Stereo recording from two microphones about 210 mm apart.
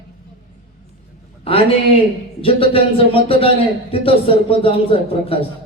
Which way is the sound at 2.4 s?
25° left (ahead or behind).